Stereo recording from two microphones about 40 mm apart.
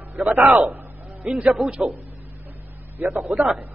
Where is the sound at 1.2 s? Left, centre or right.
Right.